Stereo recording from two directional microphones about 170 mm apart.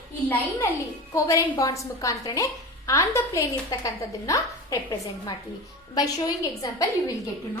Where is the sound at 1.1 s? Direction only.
20° left (ahead or behind).